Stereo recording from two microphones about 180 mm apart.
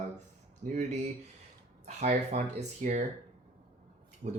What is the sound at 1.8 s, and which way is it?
Speech, 40° right (ahead or behind).